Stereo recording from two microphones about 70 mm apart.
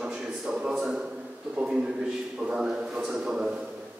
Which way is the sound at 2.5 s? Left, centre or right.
Centre.